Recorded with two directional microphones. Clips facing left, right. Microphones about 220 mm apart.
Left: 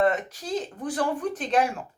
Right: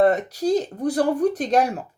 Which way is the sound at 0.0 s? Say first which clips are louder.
Right 6 dB; 40° right (ahead or behind).